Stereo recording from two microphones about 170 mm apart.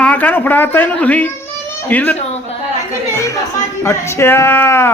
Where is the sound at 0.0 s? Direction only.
10° left (ahead or behind).